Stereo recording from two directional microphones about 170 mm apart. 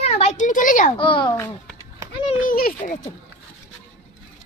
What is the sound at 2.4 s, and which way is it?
Speech, 55° left (ahead or behind).